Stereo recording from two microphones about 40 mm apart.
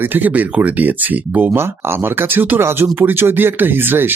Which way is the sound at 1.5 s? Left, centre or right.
Right.